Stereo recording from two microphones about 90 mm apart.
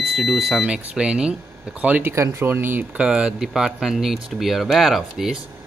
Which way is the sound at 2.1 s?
30° right (ahead or behind).